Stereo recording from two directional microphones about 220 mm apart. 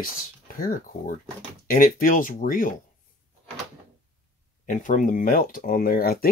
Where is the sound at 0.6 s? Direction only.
40° left (ahead or behind).